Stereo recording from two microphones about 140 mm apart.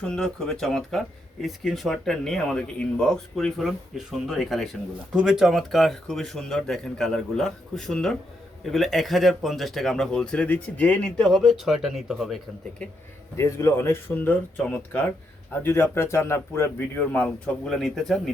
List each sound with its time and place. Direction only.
0.0 s speech: 5° left (ahead or behind)
13.3 s speech: 20° left (ahead or behind); by 18.2 s centre (ahead or behind)